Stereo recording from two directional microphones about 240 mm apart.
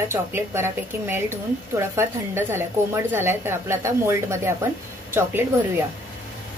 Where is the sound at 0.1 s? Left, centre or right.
Centre.